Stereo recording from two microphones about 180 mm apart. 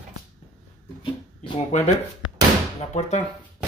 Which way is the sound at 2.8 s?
40° left (ahead or behind).